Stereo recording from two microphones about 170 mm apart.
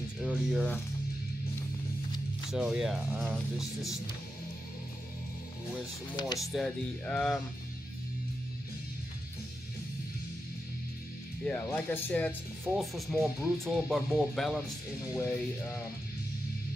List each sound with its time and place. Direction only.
0.2 s speech: 5° right (ahead or behind)
2.5 s speech: 5° right (ahead or behind)
6.1 s speech: 25° left (ahead or behind)
6.4 s speech: centre (ahead or behind)
11.4 s speech: 10° left (ahead or behind)
15.1 s speech: 15° left (ahead or behind)